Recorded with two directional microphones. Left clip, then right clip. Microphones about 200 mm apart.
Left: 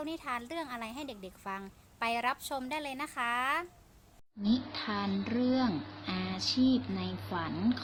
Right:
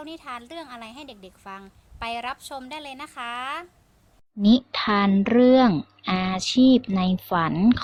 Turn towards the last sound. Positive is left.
turn(degrees=-50)  # may be behind; listen again after turning